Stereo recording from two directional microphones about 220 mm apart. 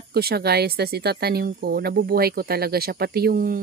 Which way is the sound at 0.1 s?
45° right (ahead or behind).